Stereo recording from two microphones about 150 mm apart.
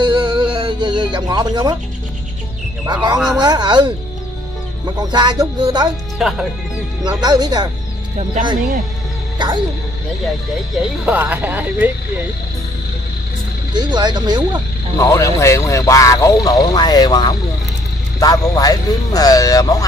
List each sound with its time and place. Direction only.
0.0 s music: 30° right (ahead or behind)
2.9 s speech: 30° right (ahead or behind)
4.9 s speech: 30° right (ahead or behind)
6.1 s speech: centre (ahead or behind)
7.2 s speech: 30° right (ahead or behind)
9.4 s speech: 30° right (ahead or behind)
11.1 s speech: 10° right (ahead or behind)
13.7 s speech: 30° right (ahead or behind)
15.0 s speech: 20° left (ahead or behind)